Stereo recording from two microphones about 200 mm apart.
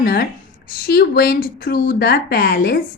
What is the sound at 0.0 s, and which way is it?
Speech, 50° left (ahead or behind).